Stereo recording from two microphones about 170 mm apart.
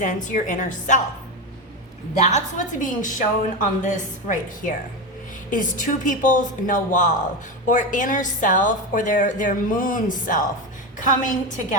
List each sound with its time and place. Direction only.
0.0 s a woman's voice: 50° left (ahead or behind)
2.1 s a woman's voice: 45° left (ahead or behind)